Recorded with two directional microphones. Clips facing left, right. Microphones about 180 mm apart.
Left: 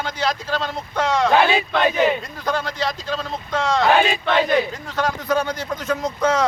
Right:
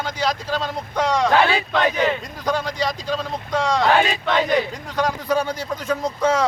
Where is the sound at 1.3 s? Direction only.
20° left (ahead or behind).